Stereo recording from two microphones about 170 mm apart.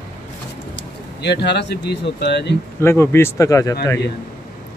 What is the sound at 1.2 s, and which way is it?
Speech, 80° left.